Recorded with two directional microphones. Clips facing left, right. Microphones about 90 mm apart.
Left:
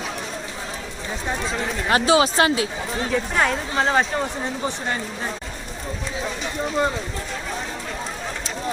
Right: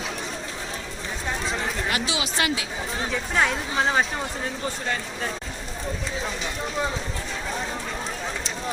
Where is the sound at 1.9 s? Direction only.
40° left (ahead or behind).